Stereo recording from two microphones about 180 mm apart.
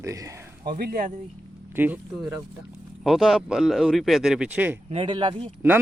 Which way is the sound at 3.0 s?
Centre (ahead or behind).